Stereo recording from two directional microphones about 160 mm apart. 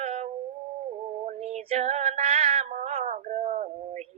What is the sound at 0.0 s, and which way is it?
Cat, 45° right (ahead or behind).